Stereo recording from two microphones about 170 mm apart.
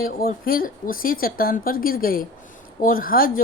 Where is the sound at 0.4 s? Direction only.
60° left (ahead or behind).